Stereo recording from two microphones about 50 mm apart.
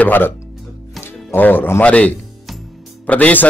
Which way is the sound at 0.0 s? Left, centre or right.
Left.